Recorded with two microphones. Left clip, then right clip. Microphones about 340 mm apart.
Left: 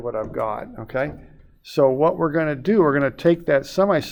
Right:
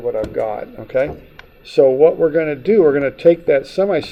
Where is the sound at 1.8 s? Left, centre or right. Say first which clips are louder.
Right 6 dB; left.